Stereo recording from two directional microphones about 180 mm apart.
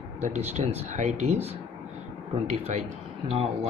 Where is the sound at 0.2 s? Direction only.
40° right (ahead or behind).